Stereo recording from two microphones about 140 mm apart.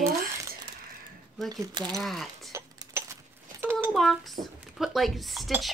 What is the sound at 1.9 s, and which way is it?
Speech, centre (ahead or behind).